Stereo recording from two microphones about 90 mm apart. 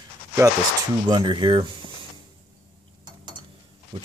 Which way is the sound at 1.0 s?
55° right (ahead or behind).